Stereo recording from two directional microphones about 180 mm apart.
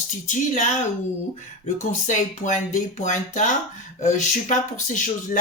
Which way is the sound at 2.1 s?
40° left (ahead or behind).